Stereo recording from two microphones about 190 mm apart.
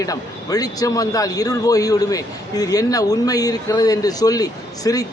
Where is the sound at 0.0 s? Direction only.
20° left (ahead or behind).